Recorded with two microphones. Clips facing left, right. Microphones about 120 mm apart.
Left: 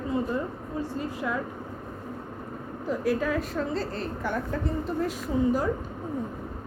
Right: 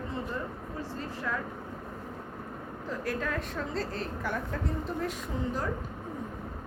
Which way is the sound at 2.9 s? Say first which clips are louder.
Left 7 dB; 10° left (ahead or behind).